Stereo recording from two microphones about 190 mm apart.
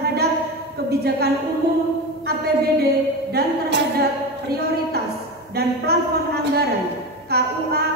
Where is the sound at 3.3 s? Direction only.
55° right (ahead or behind).